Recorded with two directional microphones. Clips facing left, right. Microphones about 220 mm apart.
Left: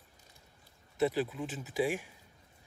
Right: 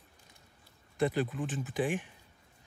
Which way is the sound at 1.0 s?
5° left (ahead or behind).